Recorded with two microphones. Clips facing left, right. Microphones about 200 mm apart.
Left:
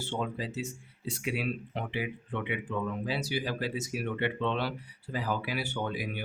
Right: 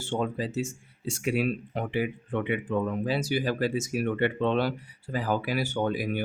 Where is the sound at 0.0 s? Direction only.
45° right (ahead or behind).